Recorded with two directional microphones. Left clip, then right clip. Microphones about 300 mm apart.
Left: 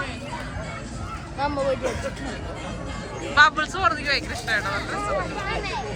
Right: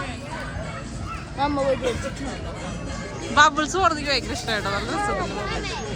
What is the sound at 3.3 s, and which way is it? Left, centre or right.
Speech, centre.